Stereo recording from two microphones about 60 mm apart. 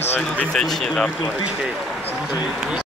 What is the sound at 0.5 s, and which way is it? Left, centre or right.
Speech, centre.